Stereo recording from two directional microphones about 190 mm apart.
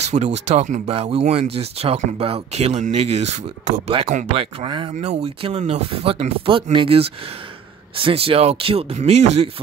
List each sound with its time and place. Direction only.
0.0 s speech: 35° right (ahead or behind)
4.3 s speech: 25° right (ahead or behind)